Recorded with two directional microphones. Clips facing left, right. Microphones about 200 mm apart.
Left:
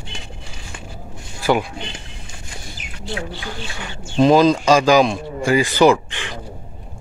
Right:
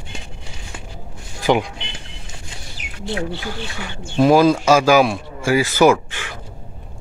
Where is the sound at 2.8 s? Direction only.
65° right (ahead or behind).